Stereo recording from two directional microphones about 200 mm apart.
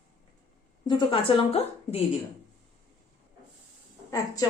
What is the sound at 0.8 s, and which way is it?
A woman's voice, 25° left (ahead or behind).